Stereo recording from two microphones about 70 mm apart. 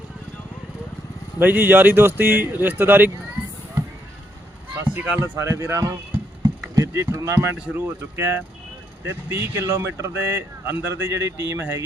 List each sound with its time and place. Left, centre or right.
1.4 s speech: right
4.8 s speech: right
5.4 s speech: right
6.4 s a sound: right
7.7 s speech: right